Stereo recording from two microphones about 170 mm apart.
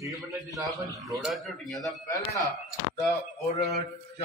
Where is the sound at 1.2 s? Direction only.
Centre (ahead or behind).